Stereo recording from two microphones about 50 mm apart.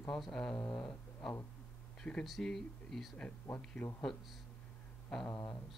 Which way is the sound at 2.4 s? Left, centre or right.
Centre.